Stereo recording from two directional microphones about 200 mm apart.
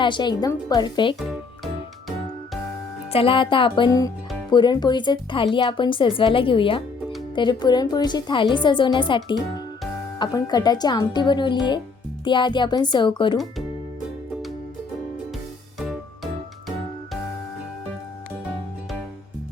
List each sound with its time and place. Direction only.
0.0 s speech: 20° left (ahead or behind)
3.1 s speech: 25° left (ahead or behind)
15.8 s music: centre (ahead or behind)